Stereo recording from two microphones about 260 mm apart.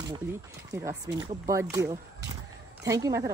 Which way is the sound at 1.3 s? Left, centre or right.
Centre.